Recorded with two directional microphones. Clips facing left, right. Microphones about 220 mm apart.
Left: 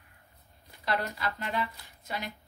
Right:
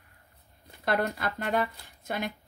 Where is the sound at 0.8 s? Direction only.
50° right (ahead or behind).